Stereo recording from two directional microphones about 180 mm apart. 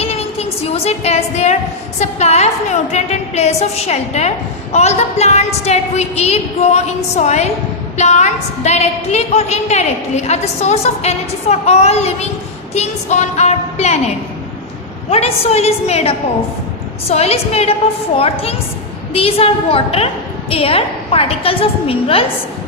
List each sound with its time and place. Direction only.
0.0 s a woman's voice: 35° left (ahead or behind)
15.1 s a woman's voice: 35° left (ahead or behind)
19.1 s a woman's voice: 30° left (ahead or behind)